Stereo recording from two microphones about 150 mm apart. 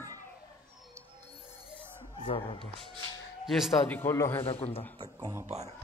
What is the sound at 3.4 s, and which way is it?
Speech, centre (ahead or behind).